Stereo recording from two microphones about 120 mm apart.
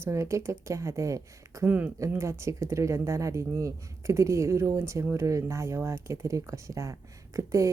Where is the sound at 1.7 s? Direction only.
15° right (ahead or behind).